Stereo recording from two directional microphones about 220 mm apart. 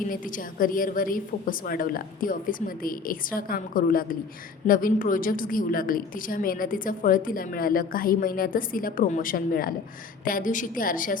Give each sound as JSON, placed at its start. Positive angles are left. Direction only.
{"t": 0.1, "sound": "a woman's voice", "side_deg": 40}